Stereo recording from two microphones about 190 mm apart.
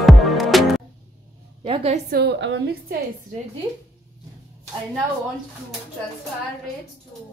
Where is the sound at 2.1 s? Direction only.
65° right (ahead or behind).